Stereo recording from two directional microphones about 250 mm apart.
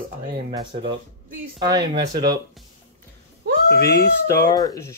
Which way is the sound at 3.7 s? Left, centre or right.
Left.